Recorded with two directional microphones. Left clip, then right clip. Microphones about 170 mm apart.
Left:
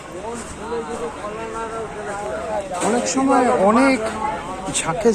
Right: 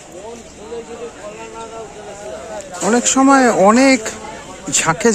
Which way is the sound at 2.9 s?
80° right.